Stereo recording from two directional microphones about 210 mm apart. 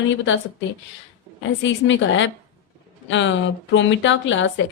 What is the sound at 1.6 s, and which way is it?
Speech, 60° left (ahead or behind).